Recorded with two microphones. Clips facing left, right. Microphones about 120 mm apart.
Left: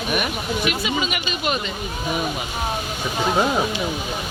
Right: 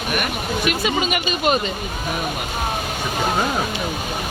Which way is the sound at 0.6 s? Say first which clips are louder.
Right 3 dB; 50° right (ahead or behind).